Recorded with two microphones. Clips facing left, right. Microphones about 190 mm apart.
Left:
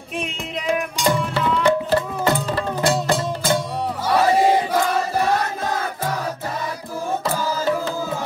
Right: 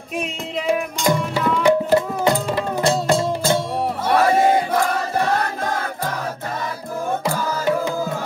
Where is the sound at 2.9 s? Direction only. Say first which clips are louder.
Right 4 dB; 25° right (ahead or behind).